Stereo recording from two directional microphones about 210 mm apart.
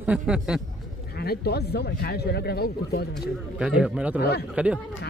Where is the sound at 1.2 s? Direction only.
50° left (ahead or behind).